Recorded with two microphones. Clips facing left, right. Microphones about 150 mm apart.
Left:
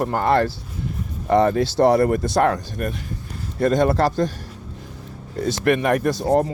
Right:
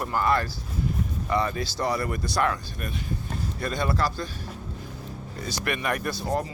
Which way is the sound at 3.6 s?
90° left.